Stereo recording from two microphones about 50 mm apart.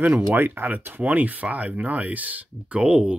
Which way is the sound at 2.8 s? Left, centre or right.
Centre.